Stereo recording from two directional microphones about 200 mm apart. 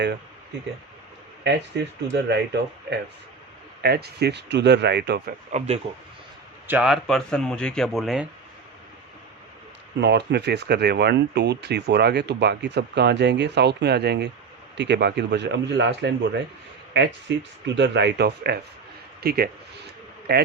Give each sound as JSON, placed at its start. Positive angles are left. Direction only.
{"t": 1.5, "sound": "speech", "side_deg": -60}
{"t": 3.8, "sound": "speech", "side_deg": -50}
{"t": 5.5, "sound": "speech", "side_deg": -35}
{"t": 6.7, "sound": "speech", "side_deg": -5}
{"t": 10.0, "sound": "a man's voice", "side_deg": -55}